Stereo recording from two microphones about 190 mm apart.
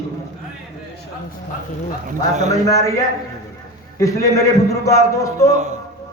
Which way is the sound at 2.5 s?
15° left (ahead or behind).